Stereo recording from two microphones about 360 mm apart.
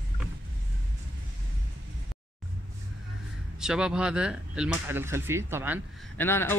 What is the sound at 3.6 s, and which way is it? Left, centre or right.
Speech, centre.